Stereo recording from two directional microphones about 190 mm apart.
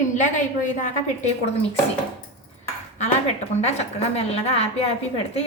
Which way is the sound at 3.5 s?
35° left (ahead or behind).